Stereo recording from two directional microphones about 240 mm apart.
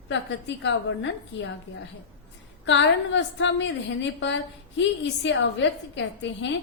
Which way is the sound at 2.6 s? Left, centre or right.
Left.